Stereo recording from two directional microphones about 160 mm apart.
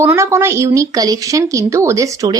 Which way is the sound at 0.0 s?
15° right (ahead or behind).